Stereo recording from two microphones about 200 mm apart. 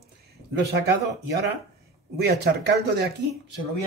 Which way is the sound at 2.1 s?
55° right (ahead or behind).